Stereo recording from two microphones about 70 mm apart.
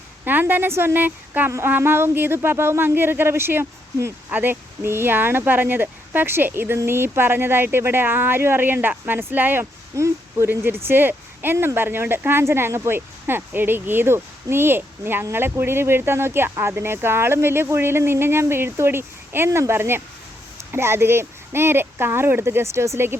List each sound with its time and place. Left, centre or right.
0.3 s speech: right
9.9 s speech: right
10.5 s speech: right